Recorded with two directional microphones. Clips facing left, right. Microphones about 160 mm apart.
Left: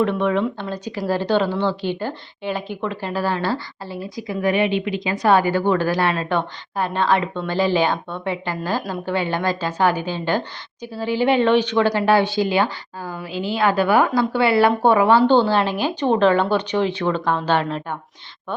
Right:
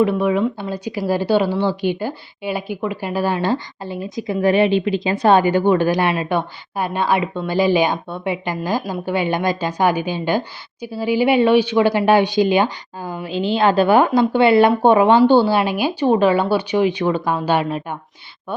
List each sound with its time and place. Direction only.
0.0 s speech: 5° right (ahead or behind)